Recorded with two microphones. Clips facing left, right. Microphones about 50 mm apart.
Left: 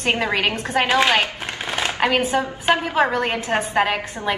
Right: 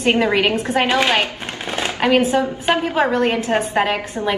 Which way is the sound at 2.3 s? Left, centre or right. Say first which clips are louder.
Right 2 dB; left.